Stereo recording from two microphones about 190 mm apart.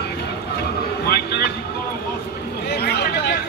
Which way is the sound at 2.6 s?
60° left (ahead or behind).